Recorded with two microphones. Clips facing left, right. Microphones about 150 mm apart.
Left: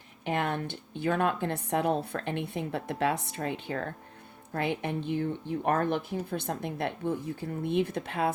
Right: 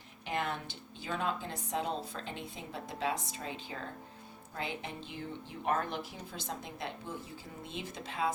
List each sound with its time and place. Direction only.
0.3 s speech: 55° left (ahead or behind)